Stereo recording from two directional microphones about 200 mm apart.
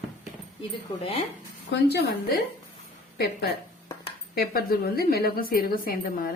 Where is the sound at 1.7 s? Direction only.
50° left (ahead or behind).